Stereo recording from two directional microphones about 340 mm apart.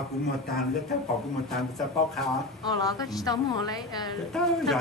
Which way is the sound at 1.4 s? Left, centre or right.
Centre.